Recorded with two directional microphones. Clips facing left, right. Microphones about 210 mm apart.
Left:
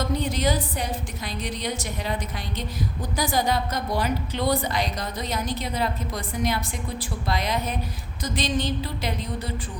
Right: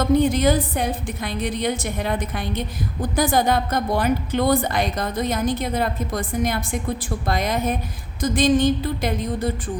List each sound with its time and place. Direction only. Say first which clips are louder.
0.2 s a woman's voice: right 7 dB; 50° right (ahead or behind)